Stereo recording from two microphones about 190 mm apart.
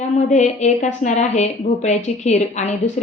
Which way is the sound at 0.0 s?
35° left (ahead or behind).